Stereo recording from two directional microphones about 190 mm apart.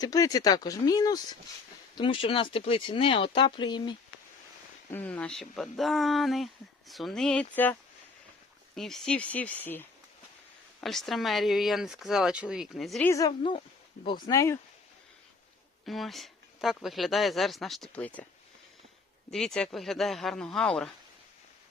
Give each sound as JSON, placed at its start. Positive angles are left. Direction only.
{"t": 0.0, "sound": "speech", "side_deg": 20}
{"t": 4.9, "sound": "speech", "side_deg": 10}
{"t": 13.1, "sound": "speech", "side_deg": 20}
{"t": 15.9, "sound": "speech", "side_deg": 0}
{"t": 19.3, "sound": "speech", "side_deg": 5}